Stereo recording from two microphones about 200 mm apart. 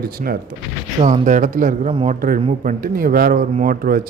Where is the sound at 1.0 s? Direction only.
35° right (ahead or behind).